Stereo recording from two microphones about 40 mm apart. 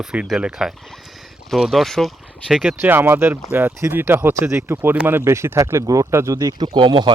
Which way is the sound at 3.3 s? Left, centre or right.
Right.